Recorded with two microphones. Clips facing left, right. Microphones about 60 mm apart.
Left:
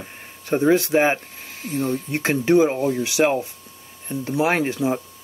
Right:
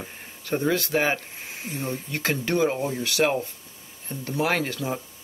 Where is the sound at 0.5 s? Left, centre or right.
Left.